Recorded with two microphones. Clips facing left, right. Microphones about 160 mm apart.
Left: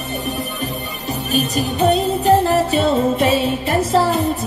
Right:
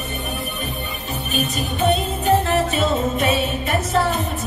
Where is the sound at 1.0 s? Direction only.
35° left (ahead or behind).